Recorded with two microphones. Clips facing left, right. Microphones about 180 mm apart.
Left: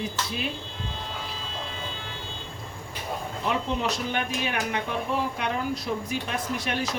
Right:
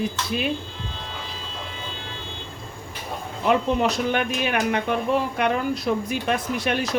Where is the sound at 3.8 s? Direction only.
65° right (ahead or behind).